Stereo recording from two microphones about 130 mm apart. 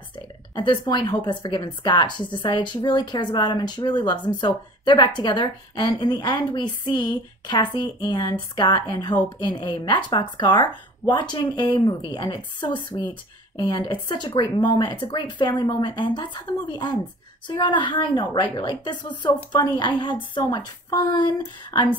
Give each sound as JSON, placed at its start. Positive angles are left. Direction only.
{"t": 0.6, "sound": "a woman's voice", "side_deg": 35}